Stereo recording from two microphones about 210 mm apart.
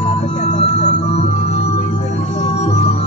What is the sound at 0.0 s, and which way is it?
Music, 30° left (ahead or behind).